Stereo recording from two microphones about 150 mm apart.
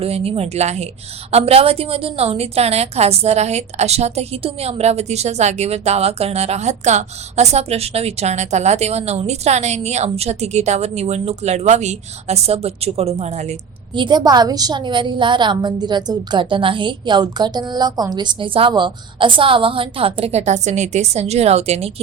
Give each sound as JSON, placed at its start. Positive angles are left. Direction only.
{"t": 0.0, "sound": "a woman's voice", "side_deg": -40}
{"t": 13.9, "sound": "a woman's voice", "side_deg": -30}